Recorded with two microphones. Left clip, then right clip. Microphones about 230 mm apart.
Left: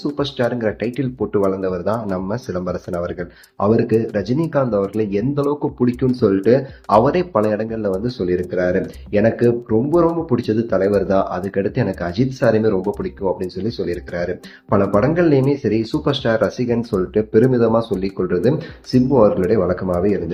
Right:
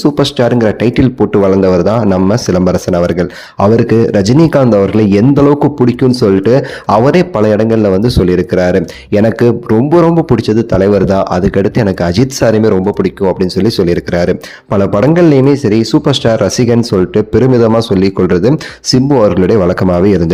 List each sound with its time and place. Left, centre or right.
0.0 s speech: right